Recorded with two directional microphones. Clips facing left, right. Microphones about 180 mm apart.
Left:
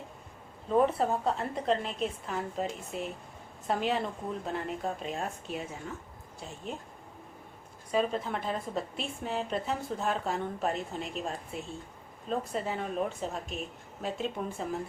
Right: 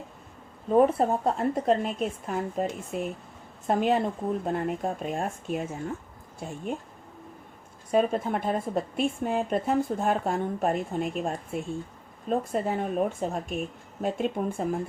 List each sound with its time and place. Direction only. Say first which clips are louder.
0.8 s speech: right 5 dB; 45° right (ahead or behind)
7.9 s speech: right 5 dB; 50° right (ahead or behind)